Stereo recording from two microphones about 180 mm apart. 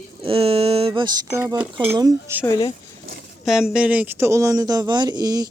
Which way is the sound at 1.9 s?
20° right (ahead or behind).